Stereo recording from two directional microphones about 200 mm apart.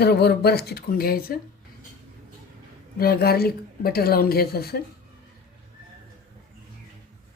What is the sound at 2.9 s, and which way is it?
Speech, 50° left (ahead or behind).